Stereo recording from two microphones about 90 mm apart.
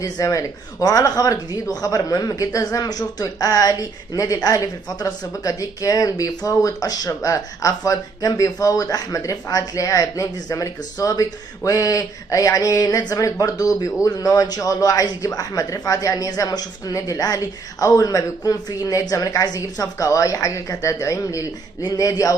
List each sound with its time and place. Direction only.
0.0 s speech: 35° left (ahead or behind)